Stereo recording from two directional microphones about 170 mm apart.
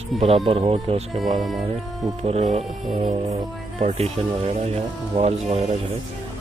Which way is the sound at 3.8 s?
40° right (ahead or behind).